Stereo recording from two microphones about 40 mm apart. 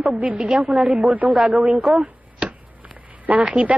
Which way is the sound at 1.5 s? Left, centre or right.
Centre.